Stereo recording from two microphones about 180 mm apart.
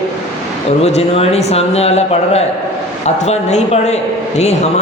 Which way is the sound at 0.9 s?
35° left (ahead or behind).